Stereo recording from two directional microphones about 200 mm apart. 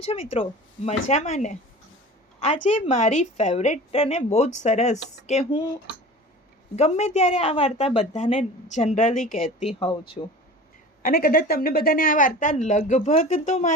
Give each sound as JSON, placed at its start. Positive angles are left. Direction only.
{"t": 0.1, "sound": "a woman's voice", "side_deg": 30}
{"t": 6.7, "sound": "a woman's voice", "side_deg": 35}
{"t": 9.8, "sound": "speech", "side_deg": 25}
{"t": 11.0, "sound": "a woman's voice", "side_deg": 45}